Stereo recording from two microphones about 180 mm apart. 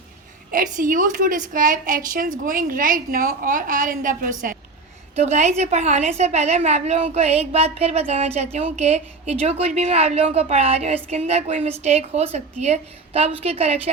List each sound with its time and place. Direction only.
0.5 s a woman's voice: 50° right (ahead or behind)
5.1 s a woman's voice: 35° right (ahead or behind)